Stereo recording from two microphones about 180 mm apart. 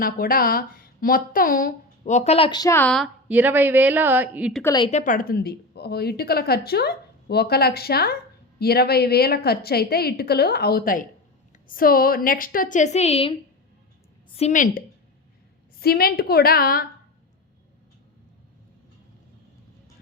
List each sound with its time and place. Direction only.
0.0 s speech: 55° left (ahead or behind); by 3.1 s 5° left (ahead or behind)
3.2 s speech: 10° right (ahead or behind)
4.6 s a woman's voice: 20° left (ahead or behind)
4.9 s a woman's voice: 45° left (ahead or behind)
14.3 s a woman's voice: 40° left (ahead or behind)